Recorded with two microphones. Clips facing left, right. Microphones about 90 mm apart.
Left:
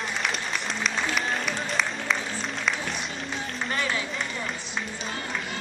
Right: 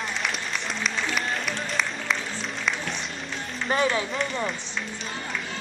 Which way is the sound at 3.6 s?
30° right (ahead or behind).